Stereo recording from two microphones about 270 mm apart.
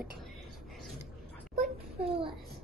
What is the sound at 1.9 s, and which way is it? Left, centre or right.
Speech, right.